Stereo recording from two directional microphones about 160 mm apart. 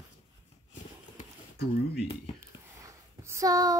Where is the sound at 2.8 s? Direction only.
20° right (ahead or behind).